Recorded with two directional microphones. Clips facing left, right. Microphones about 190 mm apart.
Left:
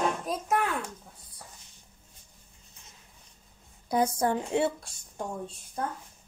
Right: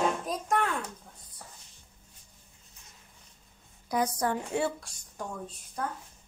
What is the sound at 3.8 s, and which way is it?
A woman's voice, 25° left (ahead or behind).